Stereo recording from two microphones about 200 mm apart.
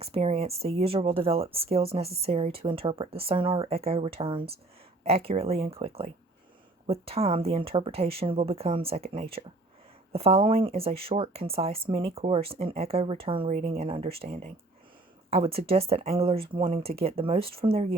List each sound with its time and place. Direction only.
0.0 s speech: 30° right (ahead or behind)